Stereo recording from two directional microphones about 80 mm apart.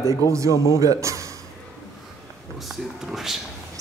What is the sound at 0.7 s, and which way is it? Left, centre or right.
Speech, right.